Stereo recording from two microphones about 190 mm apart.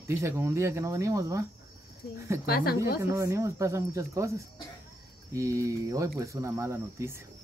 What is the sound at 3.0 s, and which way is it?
Speech, 15° right (ahead or behind).